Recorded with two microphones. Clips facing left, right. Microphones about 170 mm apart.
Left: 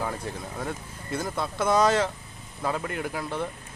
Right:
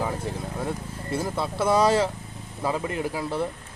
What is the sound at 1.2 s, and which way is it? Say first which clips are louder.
Speech: right 2 dB; 5° right (ahead or behind).